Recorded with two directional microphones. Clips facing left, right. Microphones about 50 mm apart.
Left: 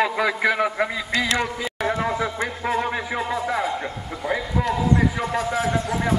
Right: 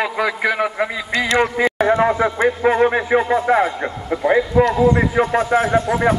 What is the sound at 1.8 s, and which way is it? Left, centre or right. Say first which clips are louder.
Speech: right 7 dB; right.